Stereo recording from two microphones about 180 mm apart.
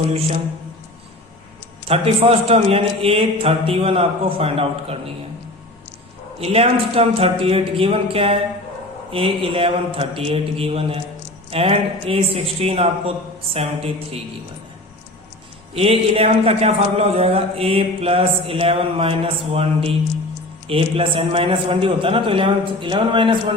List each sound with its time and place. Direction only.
1.9 s a man's voice: 35° right (ahead or behind)
6.4 s a man's voice: 35° right (ahead or behind)
15.7 s a man's voice: 35° right (ahead or behind)